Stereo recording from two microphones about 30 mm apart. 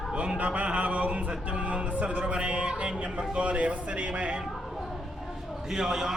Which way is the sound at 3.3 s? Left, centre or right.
Right.